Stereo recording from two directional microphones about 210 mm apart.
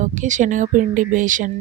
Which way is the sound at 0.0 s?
35° right (ahead or behind).